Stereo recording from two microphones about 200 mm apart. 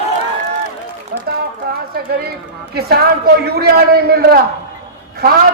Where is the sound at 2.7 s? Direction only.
50° right (ahead or behind).